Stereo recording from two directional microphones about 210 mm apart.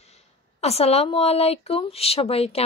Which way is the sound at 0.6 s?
30° left (ahead or behind).